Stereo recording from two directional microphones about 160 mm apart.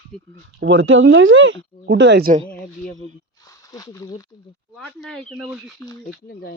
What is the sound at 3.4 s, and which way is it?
Speech, 20° left (ahead or behind).